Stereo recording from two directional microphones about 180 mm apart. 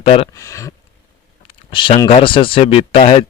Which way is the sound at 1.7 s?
30° left (ahead or behind).